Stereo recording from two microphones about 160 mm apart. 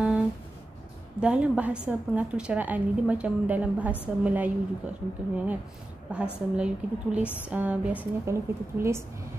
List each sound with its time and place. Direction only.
1.2 s a woman's voice: 5° right (ahead or behind)